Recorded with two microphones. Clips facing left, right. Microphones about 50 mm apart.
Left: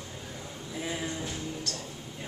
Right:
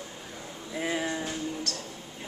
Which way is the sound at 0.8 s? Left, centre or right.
Right.